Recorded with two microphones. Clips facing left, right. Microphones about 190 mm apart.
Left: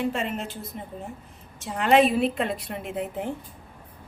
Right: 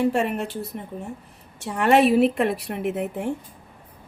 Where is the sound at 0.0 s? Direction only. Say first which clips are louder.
Right 6 dB; 65° right (ahead or behind).